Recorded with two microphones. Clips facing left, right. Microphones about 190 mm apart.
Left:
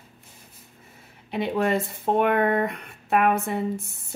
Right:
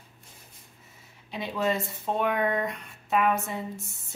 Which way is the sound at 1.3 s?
60° left (ahead or behind).